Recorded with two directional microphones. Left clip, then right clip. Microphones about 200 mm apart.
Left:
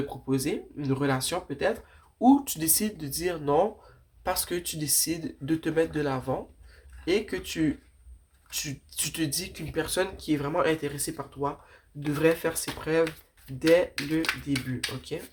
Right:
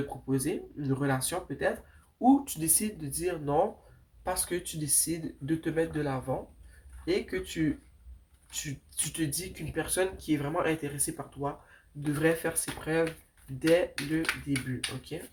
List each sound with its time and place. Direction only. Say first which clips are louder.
0.1 s speech: left 3 dB; 30° left (ahead or behind)